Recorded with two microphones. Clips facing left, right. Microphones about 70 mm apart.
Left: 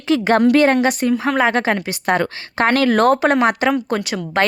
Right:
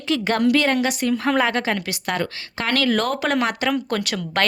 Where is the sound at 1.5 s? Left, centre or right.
Left.